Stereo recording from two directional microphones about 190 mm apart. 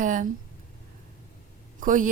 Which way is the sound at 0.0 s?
45° right (ahead or behind).